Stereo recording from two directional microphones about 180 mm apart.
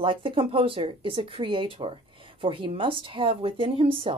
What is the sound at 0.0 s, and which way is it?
A woman's voice, 30° right (ahead or behind).